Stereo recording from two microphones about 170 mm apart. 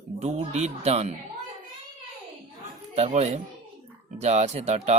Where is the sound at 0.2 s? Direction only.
40° right (ahead or behind).